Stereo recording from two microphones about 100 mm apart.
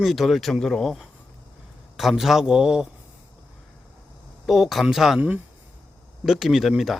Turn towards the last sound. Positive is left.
turn(degrees=0)  # may be behind; listen again after turning